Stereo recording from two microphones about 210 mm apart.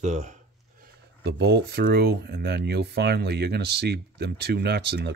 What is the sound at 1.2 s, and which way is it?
Speech, 55° right (ahead or behind).